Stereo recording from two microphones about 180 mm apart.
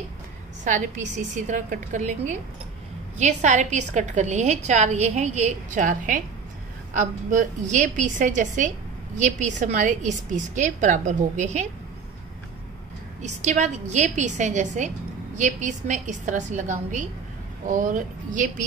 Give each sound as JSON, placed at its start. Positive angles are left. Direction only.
{"t": 0.7, "sound": "a woman's voice", "side_deg": -45}
{"t": 13.2, "sound": "a woman's voice", "side_deg": -40}